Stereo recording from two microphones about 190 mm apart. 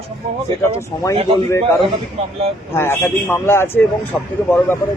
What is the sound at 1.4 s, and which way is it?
A man's voice, 15° left (ahead or behind).